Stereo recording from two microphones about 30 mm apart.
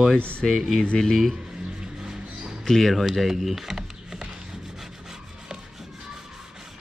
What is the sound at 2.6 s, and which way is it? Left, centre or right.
Speech, centre.